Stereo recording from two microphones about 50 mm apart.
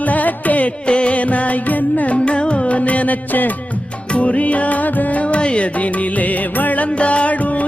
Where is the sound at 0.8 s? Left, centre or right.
Left.